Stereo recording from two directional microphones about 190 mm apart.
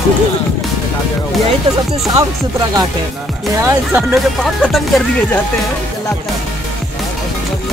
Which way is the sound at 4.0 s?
Centre (ahead or behind).